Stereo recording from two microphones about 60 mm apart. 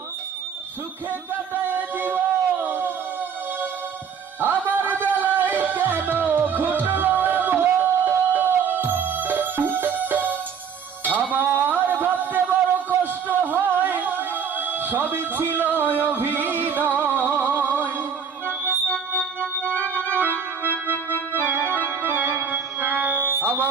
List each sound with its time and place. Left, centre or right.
1.3 s a sound: right
4.6 s music: right
11.2 s a sound: right
16.0 s music: right
18.7 s music: centre
19.8 s organ: right
21.6 s organ: left
22.0 s music: right